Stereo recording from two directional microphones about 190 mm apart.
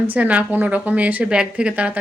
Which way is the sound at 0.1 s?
10° right (ahead or behind).